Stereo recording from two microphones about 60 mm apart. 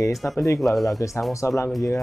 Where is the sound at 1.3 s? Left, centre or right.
Left.